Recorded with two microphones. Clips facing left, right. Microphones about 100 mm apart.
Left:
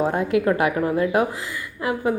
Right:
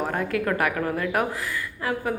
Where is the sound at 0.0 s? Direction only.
20° left (ahead or behind).